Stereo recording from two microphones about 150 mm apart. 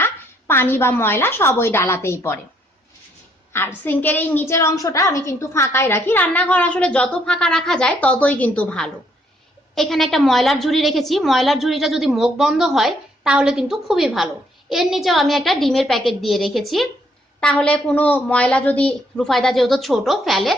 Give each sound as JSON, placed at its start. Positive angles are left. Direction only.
{"t": 0.0, "sound": "a woman's voice", "side_deg": 15}
{"t": 3.8, "sound": "a woman's voice", "side_deg": 15}